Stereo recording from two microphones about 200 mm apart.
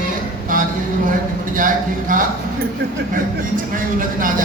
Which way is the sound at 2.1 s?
40° right (ahead or behind).